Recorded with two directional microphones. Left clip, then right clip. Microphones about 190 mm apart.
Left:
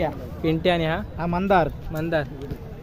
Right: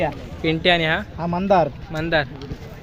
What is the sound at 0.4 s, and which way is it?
Speech, 5° left (ahead or behind).